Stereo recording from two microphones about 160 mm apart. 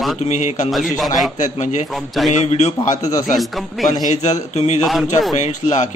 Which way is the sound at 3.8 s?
50° left (ahead or behind).